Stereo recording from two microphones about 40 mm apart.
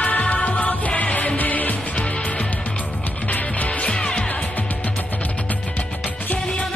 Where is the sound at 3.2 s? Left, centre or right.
Left.